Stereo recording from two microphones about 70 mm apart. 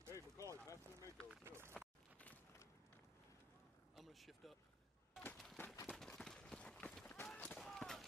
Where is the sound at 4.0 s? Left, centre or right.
Centre.